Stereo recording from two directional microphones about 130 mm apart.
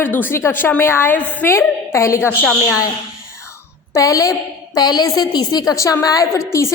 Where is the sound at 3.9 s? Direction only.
25° left (ahead or behind).